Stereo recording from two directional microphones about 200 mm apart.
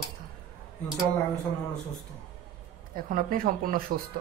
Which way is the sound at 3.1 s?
45° right (ahead or behind).